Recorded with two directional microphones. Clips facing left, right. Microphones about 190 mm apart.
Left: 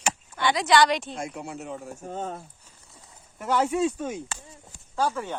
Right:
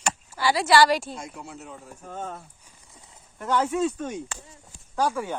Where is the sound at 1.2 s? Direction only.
70° left (ahead or behind).